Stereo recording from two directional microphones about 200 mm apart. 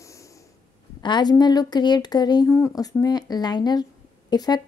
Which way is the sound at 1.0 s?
20° left (ahead or behind).